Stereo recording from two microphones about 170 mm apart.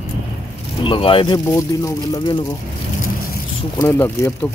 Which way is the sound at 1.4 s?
20° left (ahead or behind).